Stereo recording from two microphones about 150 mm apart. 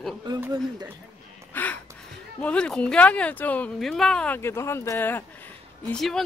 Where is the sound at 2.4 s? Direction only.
5° left (ahead or behind).